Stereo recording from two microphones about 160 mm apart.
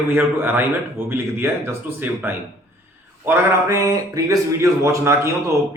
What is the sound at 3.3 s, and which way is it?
A man's voice, 20° right (ahead or behind).